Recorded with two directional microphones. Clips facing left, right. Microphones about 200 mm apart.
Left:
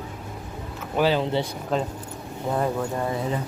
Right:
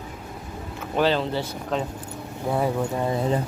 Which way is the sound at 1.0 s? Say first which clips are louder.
Even; 10° left (ahead or behind).